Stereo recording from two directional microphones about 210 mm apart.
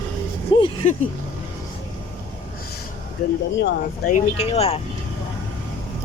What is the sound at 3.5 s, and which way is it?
Speech, 50° left (ahead or behind).